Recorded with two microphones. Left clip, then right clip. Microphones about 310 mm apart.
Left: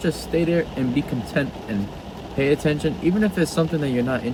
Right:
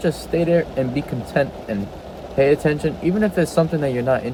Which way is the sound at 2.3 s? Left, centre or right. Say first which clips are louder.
Right 4 dB; right.